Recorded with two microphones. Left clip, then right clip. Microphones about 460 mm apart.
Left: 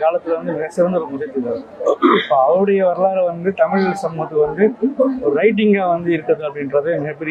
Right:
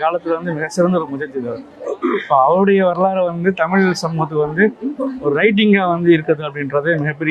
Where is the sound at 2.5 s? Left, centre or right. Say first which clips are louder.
Right 1 dB; right.